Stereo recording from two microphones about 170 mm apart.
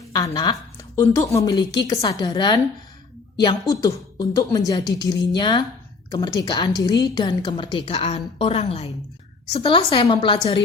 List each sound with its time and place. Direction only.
0.1 s a woman's voice: 25° left (ahead or behind)
3.7 s a woman's voice: 20° left (ahead or behind)